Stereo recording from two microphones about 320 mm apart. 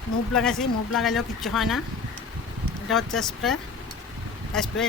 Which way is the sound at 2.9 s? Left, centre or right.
Centre.